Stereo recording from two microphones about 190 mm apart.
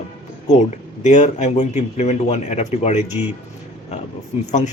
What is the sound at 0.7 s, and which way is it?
A man's voice, 40° left (ahead or behind).